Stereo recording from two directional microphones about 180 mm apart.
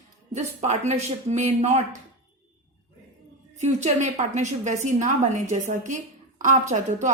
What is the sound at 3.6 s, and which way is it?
A woman's voice, 40° right (ahead or behind).